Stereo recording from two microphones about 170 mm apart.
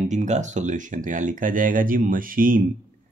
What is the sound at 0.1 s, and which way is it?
Speech, 45° right (ahead or behind).